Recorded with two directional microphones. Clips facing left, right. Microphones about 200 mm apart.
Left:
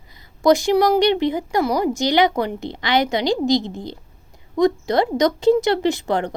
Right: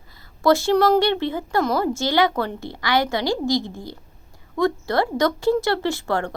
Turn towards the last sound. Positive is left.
turn(degrees=20)  # may be behind; listen again after turning